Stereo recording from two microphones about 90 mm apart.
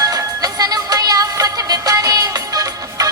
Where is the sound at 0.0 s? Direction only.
45° right (ahead or behind).